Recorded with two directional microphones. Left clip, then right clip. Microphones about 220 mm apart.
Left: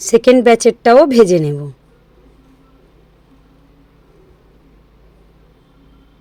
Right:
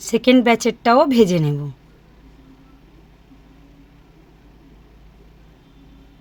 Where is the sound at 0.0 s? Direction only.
25° left (ahead or behind).